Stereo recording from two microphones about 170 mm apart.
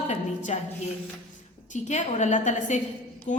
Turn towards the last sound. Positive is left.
turn(degrees=45)  # may be behind; listen again after turning